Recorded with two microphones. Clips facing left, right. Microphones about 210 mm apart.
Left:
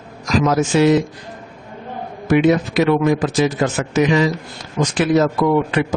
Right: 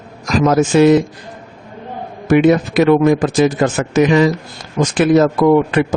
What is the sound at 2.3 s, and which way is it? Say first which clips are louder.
Speech: right 3 dB; 50° right (ahead or behind).